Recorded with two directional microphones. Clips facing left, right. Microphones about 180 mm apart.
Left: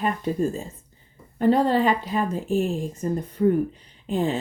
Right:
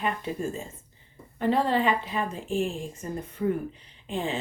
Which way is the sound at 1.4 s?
40° left (ahead or behind).